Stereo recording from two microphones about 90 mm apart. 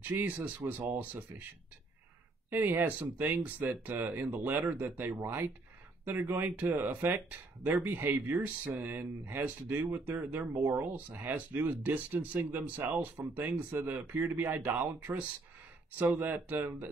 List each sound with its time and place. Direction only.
0.0 s speech: 20° right (ahead or behind)
2.5 s speech: 25° right (ahead or behind)